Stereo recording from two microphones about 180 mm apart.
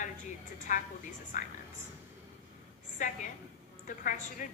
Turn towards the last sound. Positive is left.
turn(degrees=45)  # may be behind; listen again after turning